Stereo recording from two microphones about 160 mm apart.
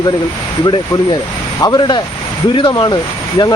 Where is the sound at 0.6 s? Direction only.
30° left (ahead or behind).